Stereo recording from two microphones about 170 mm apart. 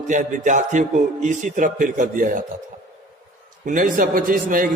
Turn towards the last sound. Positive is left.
turn(degrees=-55)  # may be behind; listen again after turning